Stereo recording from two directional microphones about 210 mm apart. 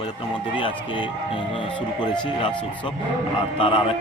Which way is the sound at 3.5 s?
25° left (ahead or behind).